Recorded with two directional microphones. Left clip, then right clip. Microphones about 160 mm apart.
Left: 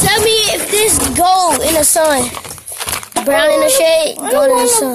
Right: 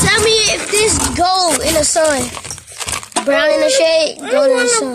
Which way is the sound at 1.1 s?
5° right (ahead or behind).